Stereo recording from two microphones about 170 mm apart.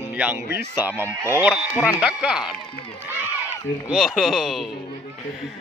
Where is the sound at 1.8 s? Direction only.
15° left (ahead or behind).